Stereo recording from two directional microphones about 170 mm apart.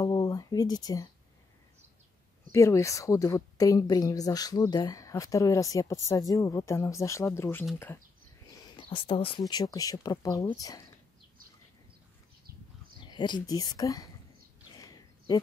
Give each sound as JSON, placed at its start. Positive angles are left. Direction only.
{"t": 0.0, "sound": "speech", "side_deg": 20}
{"t": 2.5, "sound": "a woman's voice", "side_deg": 15}
{"t": 8.7, "sound": "a woman's voice", "side_deg": 30}
{"t": 13.0, "sound": "a woman's voice", "side_deg": 25}
{"t": 14.8, "sound": "a sound", "side_deg": 20}